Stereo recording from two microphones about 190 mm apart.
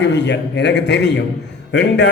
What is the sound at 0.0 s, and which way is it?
A man's voice, 65° left (ahead or behind).